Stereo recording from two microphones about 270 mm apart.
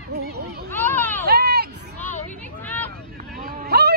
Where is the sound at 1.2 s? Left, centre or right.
Right.